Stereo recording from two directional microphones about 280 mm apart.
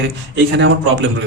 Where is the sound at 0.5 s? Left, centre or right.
Right.